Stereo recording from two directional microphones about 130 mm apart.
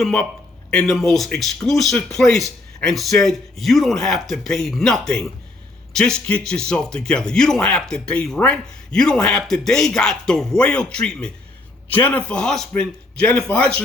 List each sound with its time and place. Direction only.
0.0 s speech: 5° left (ahead or behind)